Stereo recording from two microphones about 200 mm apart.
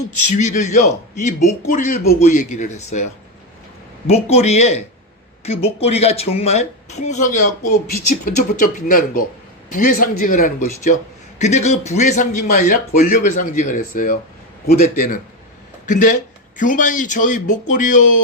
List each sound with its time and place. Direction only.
0.3 s a man's voice: 35° left (ahead or behind)